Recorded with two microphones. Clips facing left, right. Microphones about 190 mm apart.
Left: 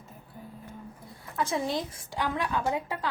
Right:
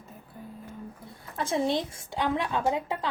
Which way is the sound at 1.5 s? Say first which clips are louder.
Right 7 dB; 25° right (ahead or behind).